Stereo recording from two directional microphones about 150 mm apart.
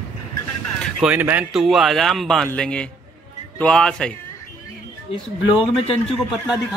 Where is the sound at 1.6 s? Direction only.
Centre (ahead or behind).